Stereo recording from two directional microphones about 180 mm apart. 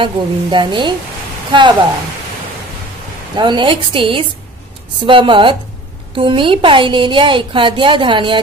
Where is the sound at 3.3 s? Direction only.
25° right (ahead or behind).